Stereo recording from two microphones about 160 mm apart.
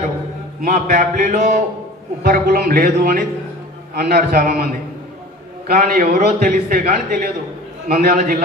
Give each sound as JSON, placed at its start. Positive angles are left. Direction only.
{"t": 0.6, "sound": "a man's voice", "side_deg": -60}
{"t": 7.9, "sound": "a man's voice", "side_deg": -70}